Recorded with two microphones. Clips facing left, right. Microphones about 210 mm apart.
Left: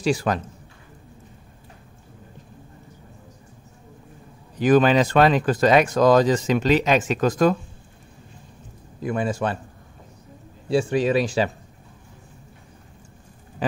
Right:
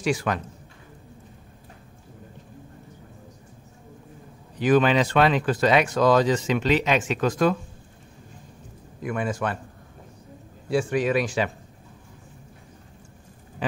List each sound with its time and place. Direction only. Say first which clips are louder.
0.0 s speech: left 3 dB; 35° left (ahead or behind)
4.6 s speech: left 3 dB; 40° left (ahead or behind)
9.0 s speech: left 3 dB; 30° left (ahead or behind)
10.7 s speech: left 3 dB; 30° left (ahead or behind)
13.6 s speech: left 3 dB; 40° left (ahead or behind)